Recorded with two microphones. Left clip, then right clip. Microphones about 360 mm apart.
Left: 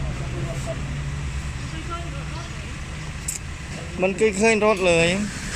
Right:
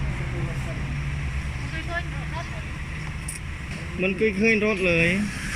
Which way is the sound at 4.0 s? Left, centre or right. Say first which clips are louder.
Left 3 dB; left.